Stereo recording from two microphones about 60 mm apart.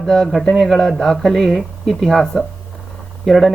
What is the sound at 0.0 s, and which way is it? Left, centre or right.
Speech, centre.